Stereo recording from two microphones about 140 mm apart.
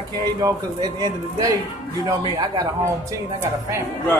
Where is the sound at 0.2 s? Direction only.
25° right (ahead or behind).